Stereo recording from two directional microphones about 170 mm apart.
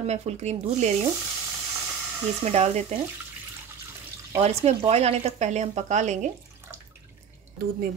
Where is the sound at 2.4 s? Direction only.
40° right (ahead or behind).